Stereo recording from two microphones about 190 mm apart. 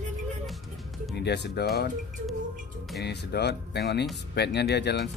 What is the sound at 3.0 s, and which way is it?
Speech, 60° left (ahead or behind).